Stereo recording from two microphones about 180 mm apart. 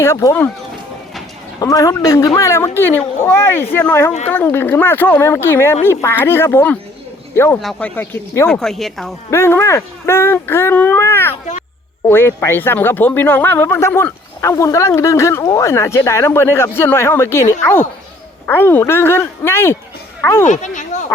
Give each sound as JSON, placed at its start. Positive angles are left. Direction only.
{"t": 0.0, "sound": "speech", "side_deg": 15}
{"t": 1.6, "sound": "speech", "side_deg": 20}
{"t": 7.6, "sound": "a woman's voice", "side_deg": 5}
{"t": 9.3, "sound": "speech", "side_deg": 15}
{"t": 20.5, "sound": "speech", "side_deg": 40}